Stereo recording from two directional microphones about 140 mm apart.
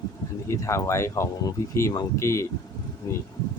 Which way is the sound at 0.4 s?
20° left (ahead or behind).